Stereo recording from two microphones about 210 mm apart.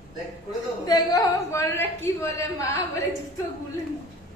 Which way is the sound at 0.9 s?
15° left (ahead or behind).